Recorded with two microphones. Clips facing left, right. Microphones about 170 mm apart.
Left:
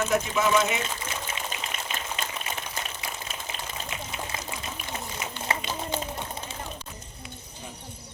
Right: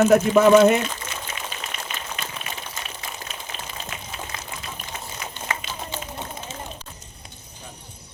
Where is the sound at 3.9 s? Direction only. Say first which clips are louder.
Left 1 dB; 25° left (ahead or behind).